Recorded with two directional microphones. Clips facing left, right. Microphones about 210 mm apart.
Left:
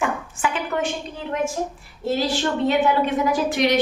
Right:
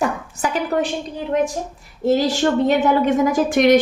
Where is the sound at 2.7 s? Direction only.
45° right (ahead or behind).